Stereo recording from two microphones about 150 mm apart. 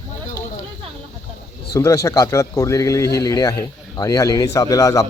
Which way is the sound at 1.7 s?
20° left (ahead or behind).